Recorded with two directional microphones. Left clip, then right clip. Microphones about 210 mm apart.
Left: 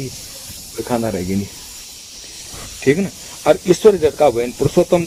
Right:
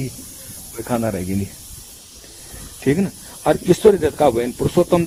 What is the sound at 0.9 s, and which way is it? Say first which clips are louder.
Speech: left 2 dB; 55° right (ahead or behind).